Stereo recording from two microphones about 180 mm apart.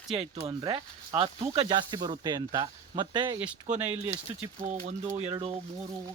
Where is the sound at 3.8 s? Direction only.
10° right (ahead or behind).